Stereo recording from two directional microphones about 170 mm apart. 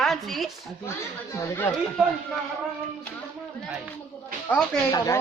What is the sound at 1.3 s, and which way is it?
Speech, 15° left (ahead or behind).